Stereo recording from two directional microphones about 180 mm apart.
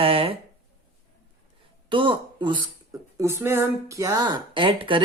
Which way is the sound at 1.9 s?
25° right (ahead or behind).